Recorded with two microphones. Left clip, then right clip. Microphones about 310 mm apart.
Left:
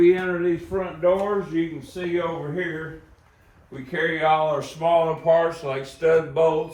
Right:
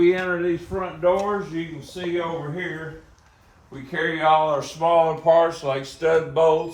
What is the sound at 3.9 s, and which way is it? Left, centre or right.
Speech, centre.